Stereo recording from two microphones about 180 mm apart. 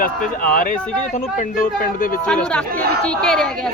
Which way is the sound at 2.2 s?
5° left (ahead or behind).